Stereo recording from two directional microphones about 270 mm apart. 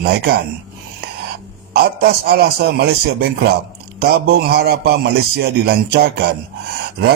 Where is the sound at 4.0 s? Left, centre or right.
Right.